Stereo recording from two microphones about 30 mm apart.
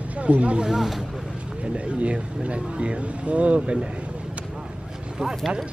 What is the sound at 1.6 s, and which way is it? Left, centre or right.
Speech, right.